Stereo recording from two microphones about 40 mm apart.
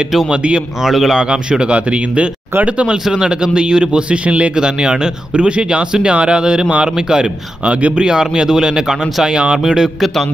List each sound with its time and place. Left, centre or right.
0.8 s a man's voice: centre
1.3 s speech: right
3.1 s speech: centre
8.0 s speech: right